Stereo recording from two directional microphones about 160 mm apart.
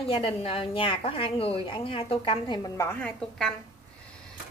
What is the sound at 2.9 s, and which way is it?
Speech, 10° left (ahead or behind).